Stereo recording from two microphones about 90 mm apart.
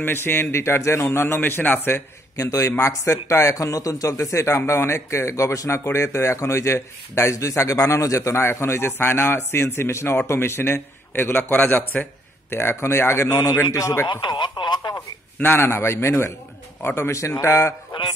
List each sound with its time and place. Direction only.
0.0 s a man's voice: 25° left (ahead or behind)
2.3 s a man's voice: 40° left (ahead or behind)
13.3 s a man's voice: 40° left (ahead or behind)
14.0 s radio: 55° left (ahead or behind)
15.0 s a man's voice: 25° left (ahead or behind)